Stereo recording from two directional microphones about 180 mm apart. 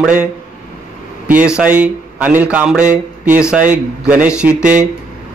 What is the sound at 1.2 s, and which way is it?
Speech, 5° right (ahead or behind).